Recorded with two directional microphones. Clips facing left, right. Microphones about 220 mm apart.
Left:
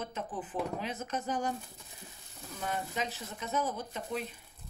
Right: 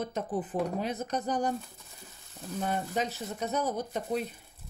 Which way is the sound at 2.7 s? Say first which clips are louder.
Right 3 dB; 40° right (ahead or behind).